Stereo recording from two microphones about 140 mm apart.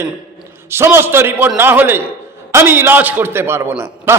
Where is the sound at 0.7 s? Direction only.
15° right (ahead or behind).